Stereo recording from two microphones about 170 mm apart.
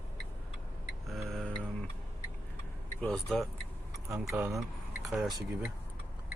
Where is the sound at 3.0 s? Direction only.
Centre (ahead or behind).